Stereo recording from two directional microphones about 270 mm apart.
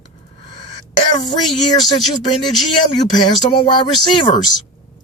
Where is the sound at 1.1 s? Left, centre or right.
Centre.